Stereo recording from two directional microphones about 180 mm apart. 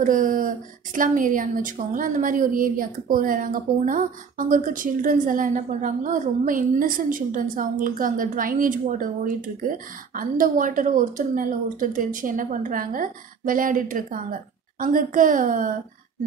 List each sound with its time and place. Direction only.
0.0 s speech: 45° right (ahead or behind)